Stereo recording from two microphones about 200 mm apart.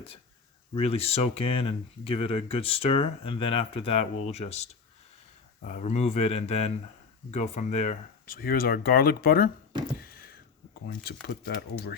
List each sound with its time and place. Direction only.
0.7 s speech: 30° left (ahead or behind); by 9.5 s 50° left (ahead or behind)
10.0 s a sound: 50° left (ahead or behind)
10.8 s speech: 55° left (ahead or behind)